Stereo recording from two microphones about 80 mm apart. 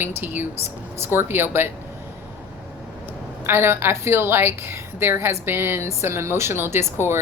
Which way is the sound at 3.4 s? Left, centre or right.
Right.